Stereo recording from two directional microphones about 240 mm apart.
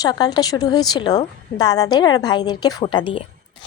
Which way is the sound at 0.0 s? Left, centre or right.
Centre.